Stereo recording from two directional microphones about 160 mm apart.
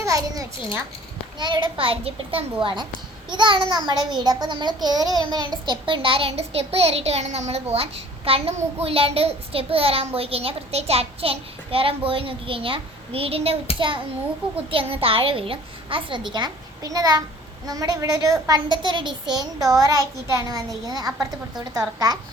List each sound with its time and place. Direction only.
0.0 s a child's voice: 20° right (ahead or behind)
1.4 s child singing: 30° right (ahead or behind)
17.7 s a woman's voice: 20° right (ahead or behind)